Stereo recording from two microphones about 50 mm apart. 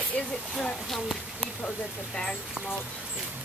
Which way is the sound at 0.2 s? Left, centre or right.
Left.